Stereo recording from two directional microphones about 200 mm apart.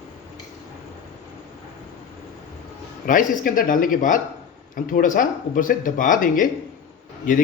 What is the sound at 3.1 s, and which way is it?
Speech, 40° left (ahead or behind).